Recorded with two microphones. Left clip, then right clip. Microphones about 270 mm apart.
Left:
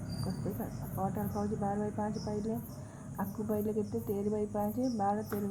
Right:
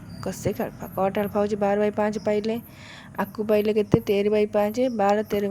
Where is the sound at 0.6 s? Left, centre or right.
Right.